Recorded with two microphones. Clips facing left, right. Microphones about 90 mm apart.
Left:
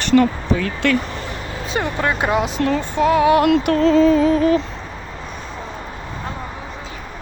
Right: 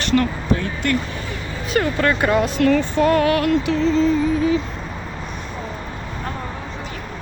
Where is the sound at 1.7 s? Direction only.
15° left (ahead or behind).